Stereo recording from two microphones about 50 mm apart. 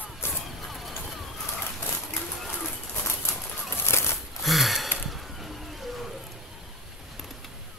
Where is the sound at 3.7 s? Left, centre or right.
Left.